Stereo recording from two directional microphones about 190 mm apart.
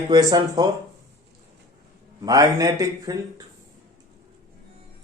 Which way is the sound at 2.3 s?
20° right (ahead or behind).